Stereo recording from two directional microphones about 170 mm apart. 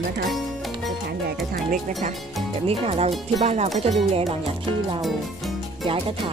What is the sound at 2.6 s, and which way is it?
Speech, 35° right (ahead or behind).